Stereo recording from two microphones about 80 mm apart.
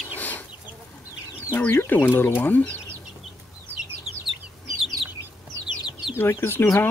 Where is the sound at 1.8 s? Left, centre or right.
Left.